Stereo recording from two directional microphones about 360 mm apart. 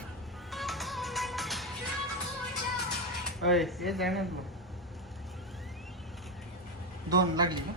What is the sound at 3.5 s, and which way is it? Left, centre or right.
Speech, centre.